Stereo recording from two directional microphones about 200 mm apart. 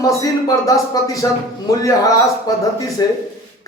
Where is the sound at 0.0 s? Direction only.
15° left (ahead or behind).